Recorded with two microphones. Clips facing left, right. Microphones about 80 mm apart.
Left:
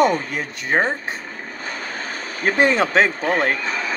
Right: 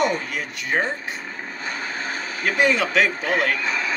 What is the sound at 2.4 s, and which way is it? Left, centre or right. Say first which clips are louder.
Speech: left 3 dB; left.